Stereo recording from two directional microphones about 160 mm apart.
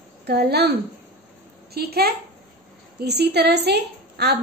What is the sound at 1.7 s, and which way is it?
A woman's voice, 80° right.